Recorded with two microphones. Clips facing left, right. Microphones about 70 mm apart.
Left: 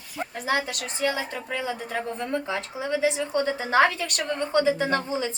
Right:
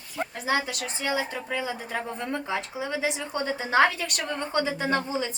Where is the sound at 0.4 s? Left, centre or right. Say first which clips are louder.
Left 1 dB; centre.